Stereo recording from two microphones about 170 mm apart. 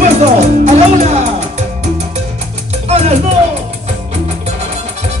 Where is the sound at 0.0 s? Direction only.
40° right (ahead or behind).